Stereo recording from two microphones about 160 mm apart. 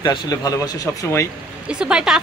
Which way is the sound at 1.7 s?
5° right (ahead or behind).